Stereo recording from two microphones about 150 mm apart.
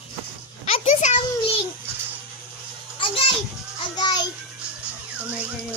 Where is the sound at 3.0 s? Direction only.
40° left (ahead or behind).